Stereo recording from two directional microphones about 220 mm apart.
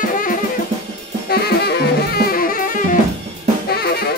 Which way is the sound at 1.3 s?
45° left (ahead or behind).